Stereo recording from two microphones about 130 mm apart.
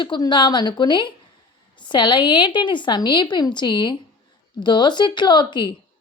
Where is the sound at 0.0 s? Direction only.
35° left (ahead or behind).